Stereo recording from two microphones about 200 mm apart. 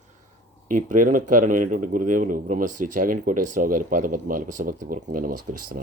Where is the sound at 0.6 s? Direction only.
40° right (ahead or behind).